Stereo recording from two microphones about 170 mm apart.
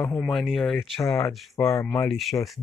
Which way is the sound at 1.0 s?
20° left (ahead or behind).